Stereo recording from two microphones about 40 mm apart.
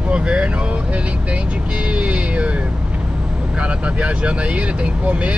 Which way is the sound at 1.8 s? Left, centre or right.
Right.